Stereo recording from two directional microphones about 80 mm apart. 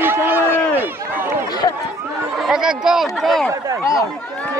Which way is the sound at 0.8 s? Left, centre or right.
Right.